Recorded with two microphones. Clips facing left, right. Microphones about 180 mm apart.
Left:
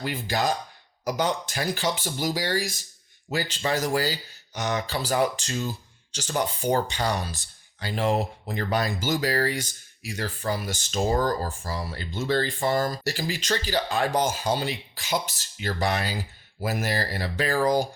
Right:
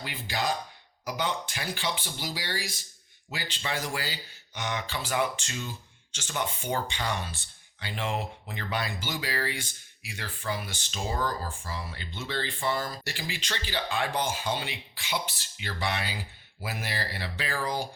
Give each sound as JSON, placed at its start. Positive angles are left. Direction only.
{"t": 0.0, "sound": "speech", "side_deg": 45}